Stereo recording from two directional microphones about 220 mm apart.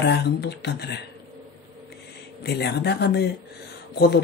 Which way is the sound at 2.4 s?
50° left (ahead or behind).